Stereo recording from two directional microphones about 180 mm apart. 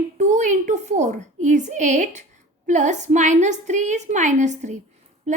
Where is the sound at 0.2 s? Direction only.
40° right (ahead or behind).